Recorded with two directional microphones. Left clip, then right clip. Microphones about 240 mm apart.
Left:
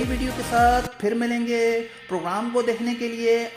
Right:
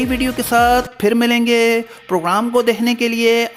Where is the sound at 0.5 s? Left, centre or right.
Right.